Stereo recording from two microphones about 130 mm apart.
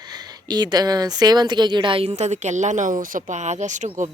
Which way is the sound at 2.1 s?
60° right (ahead or behind).